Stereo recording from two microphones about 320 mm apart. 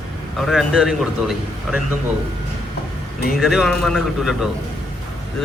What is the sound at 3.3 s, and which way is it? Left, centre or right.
A man's voice, centre.